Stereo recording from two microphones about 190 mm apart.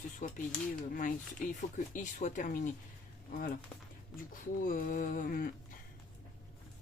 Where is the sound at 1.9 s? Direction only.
40° left (ahead or behind).